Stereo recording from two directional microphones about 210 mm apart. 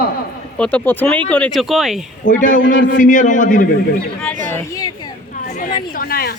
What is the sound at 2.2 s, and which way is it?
Speech, 60° left (ahead or behind).